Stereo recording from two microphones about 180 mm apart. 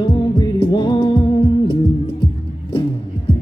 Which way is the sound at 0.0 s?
25° left (ahead or behind).